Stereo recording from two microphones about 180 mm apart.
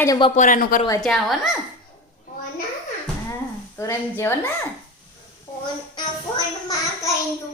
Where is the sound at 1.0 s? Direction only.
Centre (ahead or behind).